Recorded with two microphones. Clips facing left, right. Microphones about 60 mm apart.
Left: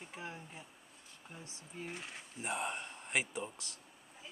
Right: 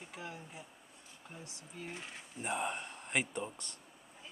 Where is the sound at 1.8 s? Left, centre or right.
Centre.